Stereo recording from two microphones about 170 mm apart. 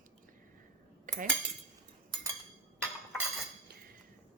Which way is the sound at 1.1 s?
50° right (ahead or behind).